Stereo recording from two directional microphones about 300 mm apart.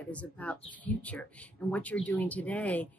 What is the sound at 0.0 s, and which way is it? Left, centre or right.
Speech, centre.